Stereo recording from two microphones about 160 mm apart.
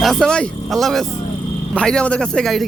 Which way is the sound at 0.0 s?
5° left (ahead or behind).